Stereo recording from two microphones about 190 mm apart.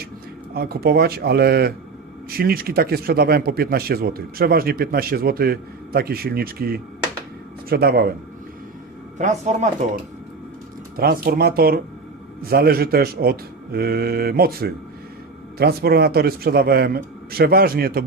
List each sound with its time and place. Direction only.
0.5 s speech: 55° right (ahead or behind)
9.1 s speech: 40° right (ahead or behind)
10.9 s speech: 50° right (ahead or behind)